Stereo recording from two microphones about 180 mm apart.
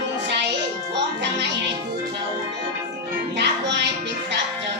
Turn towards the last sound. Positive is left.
turn(degrees=-75)  # may be behind; listen again after turning